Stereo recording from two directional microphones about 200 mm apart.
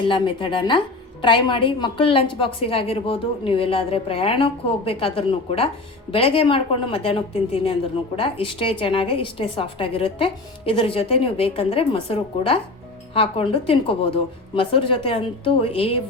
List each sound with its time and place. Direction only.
0.1 s a woman's voice: 25° left (ahead or behind)